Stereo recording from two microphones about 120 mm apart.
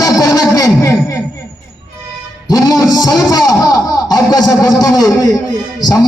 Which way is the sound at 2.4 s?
30° left (ahead or behind).